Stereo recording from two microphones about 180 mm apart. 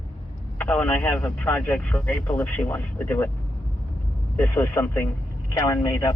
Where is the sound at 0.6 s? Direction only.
10° left (ahead or behind).